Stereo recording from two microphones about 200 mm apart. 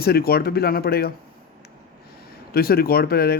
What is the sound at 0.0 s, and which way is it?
Speech, 50° left (ahead or behind).